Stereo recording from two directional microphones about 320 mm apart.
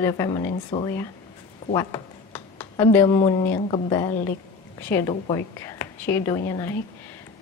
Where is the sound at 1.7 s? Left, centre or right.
Centre.